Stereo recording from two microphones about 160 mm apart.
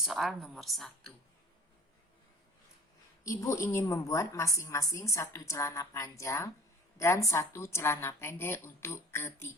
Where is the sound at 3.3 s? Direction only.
20° left (ahead or behind).